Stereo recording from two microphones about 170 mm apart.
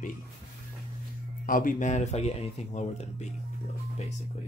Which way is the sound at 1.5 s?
55° left (ahead or behind).